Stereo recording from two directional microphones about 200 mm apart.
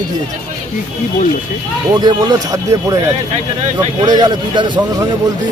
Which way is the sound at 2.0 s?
20° right (ahead or behind).